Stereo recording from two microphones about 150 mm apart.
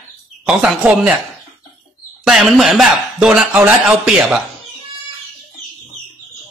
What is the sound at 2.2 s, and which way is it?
Speech, centre (ahead or behind).